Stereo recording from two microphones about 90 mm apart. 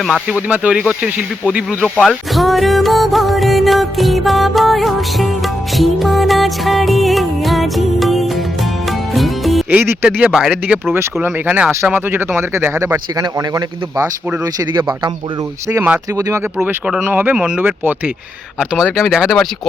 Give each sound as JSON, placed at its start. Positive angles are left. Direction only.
{"t": 0.0, "sound": "music", "side_deg": 0}
{"t": 0.3, "sound": "speech", "side_deg": -15}
{"t": 2.0, "sound": "music", "side_deg": 0}
{"t": 9.6, "sound": "speech", "side_deg": -25}
{"t": 10.2, "sound": "speech", "side_deg": -5}
{"t": 10.9, "sound": "speech", "side_deg": -25}
{"t": 13.2, "sound": "speech", "side_deg": -45}
{"t": 16.1, "sound": "speech", "side_deg": -40}
{"t": 16.6, "sound": "speech", "side_deg": -20}
{"t": 18.6, "sound": "music", "side_deg": -5}